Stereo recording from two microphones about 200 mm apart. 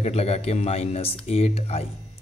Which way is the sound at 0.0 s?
30° left (ahead or behind).